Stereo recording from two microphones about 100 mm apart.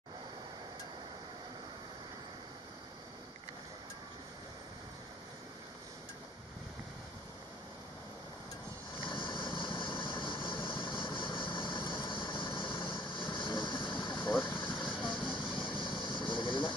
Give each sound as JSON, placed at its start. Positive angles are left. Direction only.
{"t": 9.1, "sound": "vehicle", "side_deg": 55}